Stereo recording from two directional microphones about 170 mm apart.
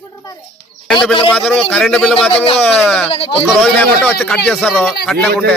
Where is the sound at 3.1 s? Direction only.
35° left (ahead or behind).